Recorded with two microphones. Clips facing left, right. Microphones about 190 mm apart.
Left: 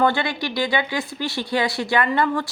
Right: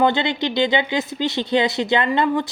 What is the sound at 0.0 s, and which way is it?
Speech, 20° right (ahead or behind).